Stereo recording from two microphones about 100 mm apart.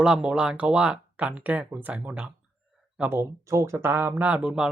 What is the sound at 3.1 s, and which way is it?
Speech, 30° right (ahead or behind).